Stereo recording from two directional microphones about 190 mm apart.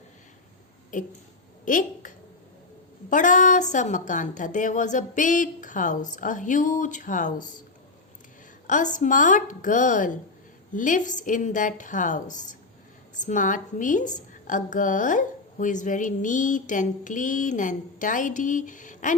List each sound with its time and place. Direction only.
1.6 s a woman's voice: 45° left (ahead or behind)
8.6 s a woman's voice: 40° left (ahead or behind)